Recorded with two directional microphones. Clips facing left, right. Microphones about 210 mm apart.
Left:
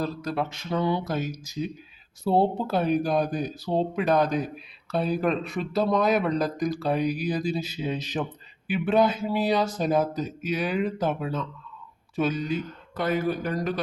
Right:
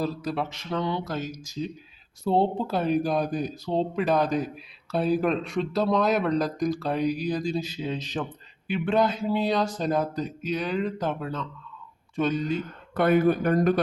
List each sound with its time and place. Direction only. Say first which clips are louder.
0.0 s speech: even; 5° right (ahead or behind)
0.7 s speech: left 3 dB; 10° left (ahead or behind)
12.9 s speech: right 5 dB; 60° right (ahead or behind)